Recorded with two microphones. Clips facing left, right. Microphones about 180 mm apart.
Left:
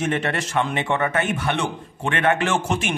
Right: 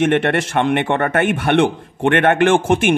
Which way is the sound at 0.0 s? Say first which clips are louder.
Right 8 dB; 65° right (ahead or behind).